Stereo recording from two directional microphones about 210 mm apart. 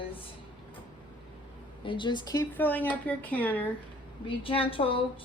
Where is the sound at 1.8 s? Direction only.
25° left (ahead or behind); by 3.7 s 5° left (ahead or behind).